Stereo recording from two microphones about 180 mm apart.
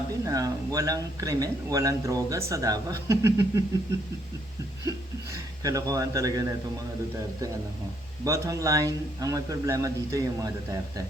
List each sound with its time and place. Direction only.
0.3 s a man's voice: 20° right (ahead or behind)
4.9 s a sound: 20° right (ahead or behind)
8.2 s a man's voice: 20° right (ahead or behind)